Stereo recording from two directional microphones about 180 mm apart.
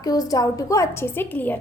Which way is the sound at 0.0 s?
20° left (ahead or behind).